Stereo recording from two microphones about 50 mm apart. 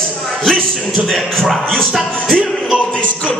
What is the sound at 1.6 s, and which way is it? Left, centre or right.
A man's voice, centre.